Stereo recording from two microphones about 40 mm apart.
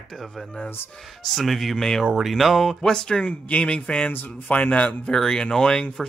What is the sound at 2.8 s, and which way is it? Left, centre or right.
Speech, centre.